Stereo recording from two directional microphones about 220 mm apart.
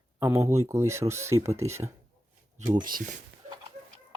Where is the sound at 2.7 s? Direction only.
40° right (ahead or behind).